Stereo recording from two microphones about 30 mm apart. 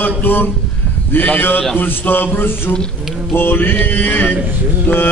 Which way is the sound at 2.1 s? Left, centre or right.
Left.